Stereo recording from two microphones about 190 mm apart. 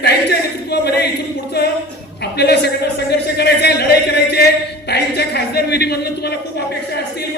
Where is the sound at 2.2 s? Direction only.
60° left (ahead or behind).